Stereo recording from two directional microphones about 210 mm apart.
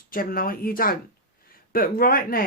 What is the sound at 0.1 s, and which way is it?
Speech, 45° left (ahead or behind).